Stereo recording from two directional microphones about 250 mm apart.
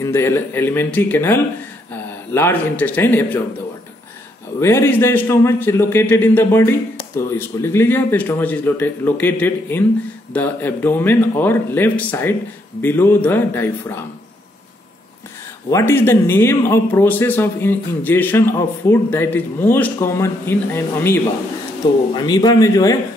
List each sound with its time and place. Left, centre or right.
0.0 s speech: centre
4.6 s speech: centre
15.7 s speech: centre